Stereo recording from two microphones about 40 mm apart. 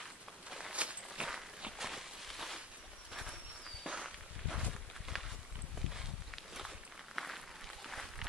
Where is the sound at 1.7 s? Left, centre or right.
Centre.